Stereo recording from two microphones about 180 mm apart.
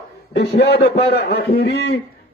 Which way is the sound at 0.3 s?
65° left (ahead or behind).